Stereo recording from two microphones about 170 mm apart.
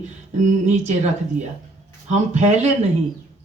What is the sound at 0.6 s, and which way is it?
Speech, 40° right (ahead or behind).